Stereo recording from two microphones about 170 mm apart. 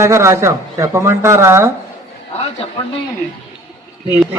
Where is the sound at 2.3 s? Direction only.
35° left (ahead or behind).